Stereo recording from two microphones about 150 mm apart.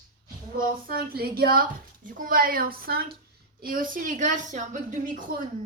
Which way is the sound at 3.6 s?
70° right (ahead or behind).